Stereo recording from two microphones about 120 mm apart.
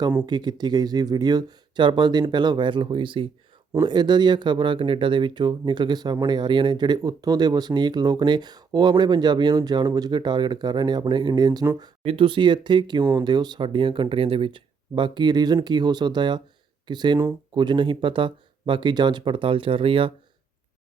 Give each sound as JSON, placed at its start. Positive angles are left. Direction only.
{"t": 0.3, "sound": "speech", "side_deg": -35}